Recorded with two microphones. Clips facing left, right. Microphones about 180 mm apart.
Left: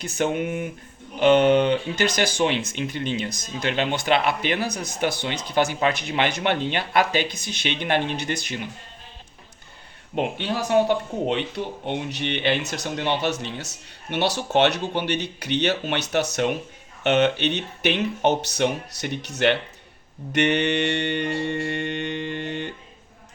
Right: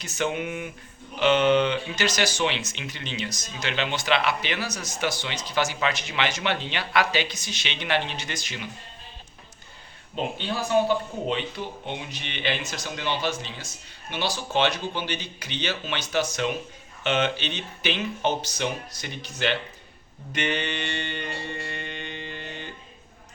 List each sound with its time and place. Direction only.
0.0 s speech: 50° left (ahead or behind)
10.2 s speech: 70° left (ahead or behind)